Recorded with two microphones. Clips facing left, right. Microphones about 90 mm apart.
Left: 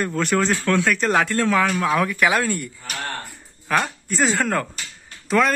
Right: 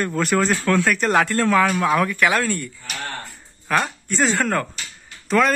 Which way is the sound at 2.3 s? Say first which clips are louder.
Even; 15° left (ahead or behind).